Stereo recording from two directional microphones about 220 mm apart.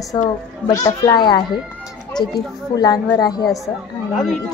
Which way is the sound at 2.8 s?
15° left (ahead or behind).